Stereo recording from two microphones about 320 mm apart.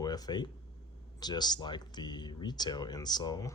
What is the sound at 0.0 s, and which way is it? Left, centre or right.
Speech, centre.